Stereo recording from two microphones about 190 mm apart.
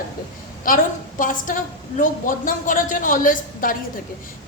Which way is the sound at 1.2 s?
45° left (ahead or behind).